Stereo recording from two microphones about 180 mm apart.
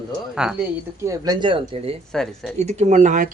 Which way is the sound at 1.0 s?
20° right (ahead or behind).